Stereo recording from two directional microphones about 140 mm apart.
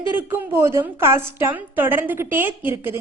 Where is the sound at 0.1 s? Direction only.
15° right (ahead or behind).